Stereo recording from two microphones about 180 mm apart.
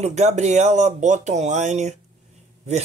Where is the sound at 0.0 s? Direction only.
40° right (ahead or behind).